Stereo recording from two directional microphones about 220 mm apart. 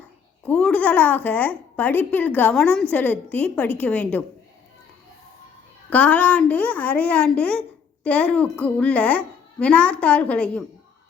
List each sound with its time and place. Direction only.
0.4 s a woman's voice: 5° left (ahead or behind)
5.9 s a woman's voice: 5° left (ahead or behind)